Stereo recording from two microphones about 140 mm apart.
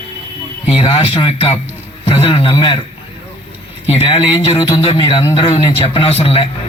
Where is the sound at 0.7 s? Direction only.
40° left (ahead or behind).